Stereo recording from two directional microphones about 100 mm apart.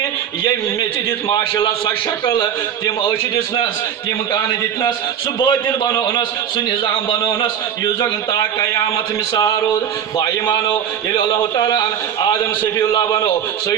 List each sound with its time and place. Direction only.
1.3 s a man's voice: 45° left (ahead or behind)
2.2 s speech: 55° left (ahead or behind)
4.3 s a man's voice: 50° left (ahead or behind)
8.3 s a man's voice: 30° left (ahead or behind)
12.9 s a man's voice: 45° left (ahead or behind)